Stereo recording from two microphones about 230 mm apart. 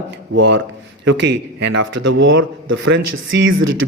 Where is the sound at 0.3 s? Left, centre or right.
Right.